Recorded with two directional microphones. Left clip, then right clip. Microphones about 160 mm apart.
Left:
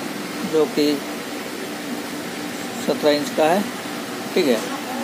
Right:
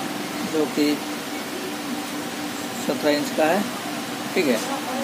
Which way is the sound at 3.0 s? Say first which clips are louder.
Left 3 dB; 30° left (ahead or behind).